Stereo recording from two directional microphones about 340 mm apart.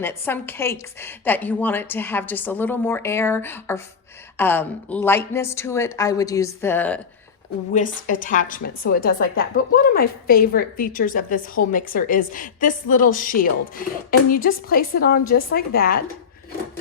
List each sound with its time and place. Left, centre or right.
0.0 s a woman's voice: centre
7.7 s a woman's voice: left